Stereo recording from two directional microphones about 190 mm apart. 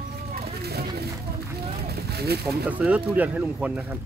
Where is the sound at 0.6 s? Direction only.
55° right (ahead or behind).